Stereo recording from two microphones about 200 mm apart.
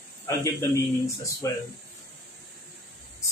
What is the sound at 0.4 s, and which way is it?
Speech, 15° left (ahead or behind).